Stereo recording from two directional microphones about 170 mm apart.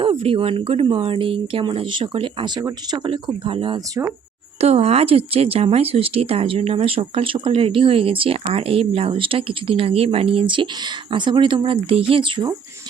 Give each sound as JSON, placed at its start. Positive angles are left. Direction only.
{"t": 0.0, "sound": "speech", "side_deg": -35}